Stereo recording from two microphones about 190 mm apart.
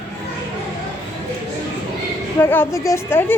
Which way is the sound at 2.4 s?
10° left (ahead or behind).